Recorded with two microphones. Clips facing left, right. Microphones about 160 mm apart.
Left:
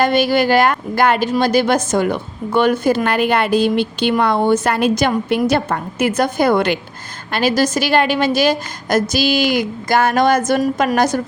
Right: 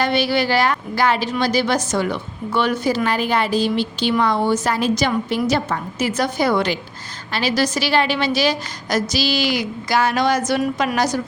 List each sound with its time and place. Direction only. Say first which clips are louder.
0.0 s a woman's voice: left 4 dB; 45° left (ahead or behind)